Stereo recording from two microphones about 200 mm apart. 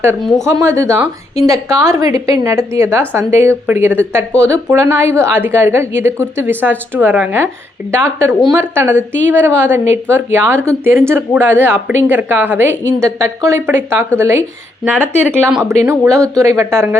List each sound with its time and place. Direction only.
0.2 s speech: centre (ahead or behind)
0.4 s speech: 15° right (ahead or behind)
15.3 s speech: centre (ahead or behind)
15.8 s speech: 15° right (ahead or behind)